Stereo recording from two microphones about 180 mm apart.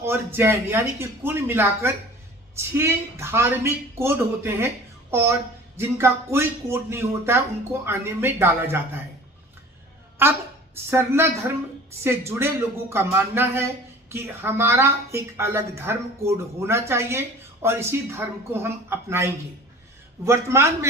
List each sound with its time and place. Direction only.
0.0 s a woman's voice: 15° right (ahead or behind)
10.2 s a woman's voice: 10° right (ahead or behind)